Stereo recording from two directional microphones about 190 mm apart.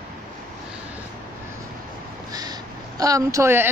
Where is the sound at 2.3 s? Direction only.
20° right (ahead or behind).